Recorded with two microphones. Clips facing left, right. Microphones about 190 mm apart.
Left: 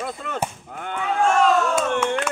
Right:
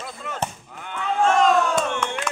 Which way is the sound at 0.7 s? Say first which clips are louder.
Left 6 dB; 55° left (ahead or behind).